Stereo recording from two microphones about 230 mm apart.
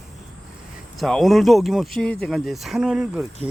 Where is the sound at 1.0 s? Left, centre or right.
Centre.